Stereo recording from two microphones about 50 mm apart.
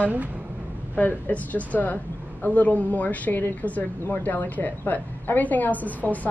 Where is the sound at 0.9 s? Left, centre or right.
Left.